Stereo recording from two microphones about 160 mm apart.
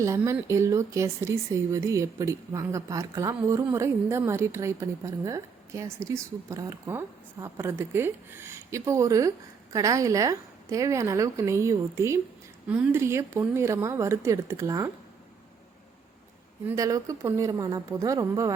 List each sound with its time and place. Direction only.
0.0 s a woman's voice: 20° right (ahead or behind)
16.6 s a woman's voice: 20° right (ahead or behind)